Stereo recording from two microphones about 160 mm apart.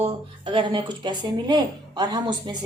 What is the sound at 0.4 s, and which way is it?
A woman's voice, 30° right (ahead or behind).